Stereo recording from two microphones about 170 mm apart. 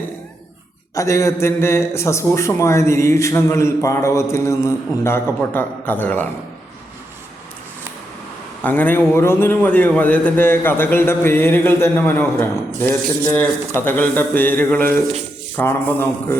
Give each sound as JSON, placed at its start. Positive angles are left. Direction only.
{"t": 0.9, "sound": "a man's voice", "side_deg": 20}
{"t": 8.6, "sound": "a man's voice", "side_deg": 10}